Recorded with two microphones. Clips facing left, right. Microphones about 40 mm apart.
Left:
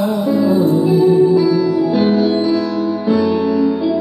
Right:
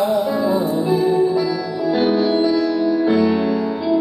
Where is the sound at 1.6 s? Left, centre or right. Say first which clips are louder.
Left 6 dB; left.